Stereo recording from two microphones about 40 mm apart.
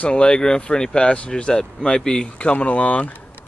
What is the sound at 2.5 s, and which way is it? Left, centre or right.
Speech, left.